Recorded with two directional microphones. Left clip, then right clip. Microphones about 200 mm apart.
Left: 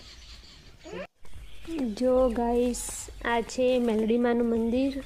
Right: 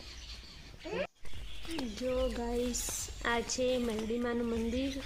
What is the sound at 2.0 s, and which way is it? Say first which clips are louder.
A woman's voice: left 11 dB; 25° left (ahead or behind).